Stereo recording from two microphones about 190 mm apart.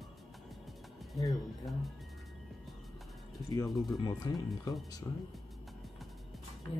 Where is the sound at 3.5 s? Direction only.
20° left (ahead or behind).